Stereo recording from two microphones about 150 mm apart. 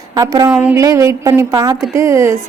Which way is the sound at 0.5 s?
10° right (ahead or behind).